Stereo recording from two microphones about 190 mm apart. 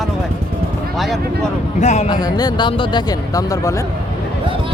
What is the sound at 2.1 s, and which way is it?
Speech, 20° left (ahead or behind).